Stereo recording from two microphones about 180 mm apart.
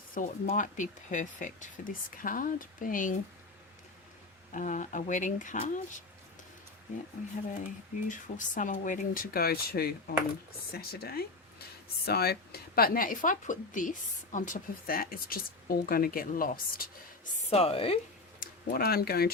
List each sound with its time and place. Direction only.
0.1 s speech: 50° left (ahead or behind)
4.5 s speech: 45° left (ahead or behind)
8.0 s speech: 45° left (ahead or behind)
17.5 s a woman's voice: 35° left (ahead or behind)
18.3 s speech: 55° left (ahead or behind)